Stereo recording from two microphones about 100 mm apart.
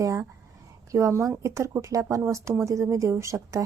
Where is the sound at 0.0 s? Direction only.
30° right (ahead or behind).